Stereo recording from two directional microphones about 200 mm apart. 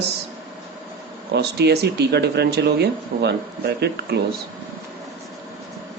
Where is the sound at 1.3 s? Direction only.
55° right (ahead or behind).